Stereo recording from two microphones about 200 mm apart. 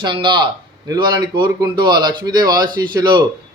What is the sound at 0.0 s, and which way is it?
A man's voice, 25° right (ahead or behind).